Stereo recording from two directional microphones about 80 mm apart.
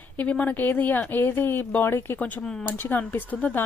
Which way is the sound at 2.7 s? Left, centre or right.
Left.